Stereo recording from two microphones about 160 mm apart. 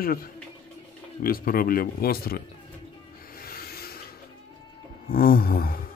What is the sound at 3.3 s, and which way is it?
Rub, 65° left (ahead or behind).